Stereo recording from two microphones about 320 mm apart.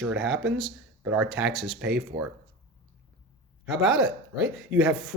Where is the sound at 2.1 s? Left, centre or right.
Centre.